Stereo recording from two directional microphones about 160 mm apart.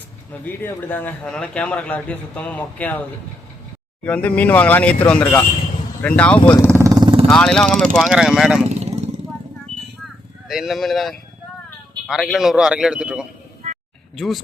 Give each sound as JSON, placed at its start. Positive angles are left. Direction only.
{"t": 0.4, "sound": "a man's voice", "side_deg": 10}
{"t": 4.0, "sound": "a man's voice", "side_deg": 10}
{"t": 6.4, "sound": "speech", "side_deg": 25}
{"t": 6.7, "sound": "vehicle", "side_deg": -20}
{"t": 7.3, "sound": "a man's voice", "side_deg": 5}
{"t": 8.7, "sound": "vehicle", "side_deg": -45}
{"t": 10.5, "sound": "a man's voice", "side_deg": 0}